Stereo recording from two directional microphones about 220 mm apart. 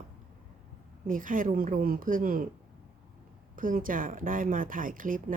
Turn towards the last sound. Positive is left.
turn(degrees=-40)  # may be behind; listen again after turning